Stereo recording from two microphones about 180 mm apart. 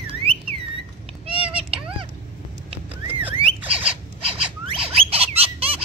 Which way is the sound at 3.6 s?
30° right (ahead or behind).